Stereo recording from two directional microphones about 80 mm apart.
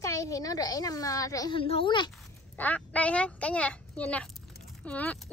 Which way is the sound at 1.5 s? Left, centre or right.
Left.